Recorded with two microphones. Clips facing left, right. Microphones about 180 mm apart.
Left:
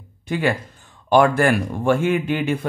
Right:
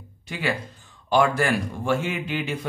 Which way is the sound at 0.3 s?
50° left (ahead or behind).